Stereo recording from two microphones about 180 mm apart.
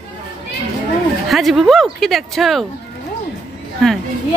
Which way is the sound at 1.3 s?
Centre (ahead or behind).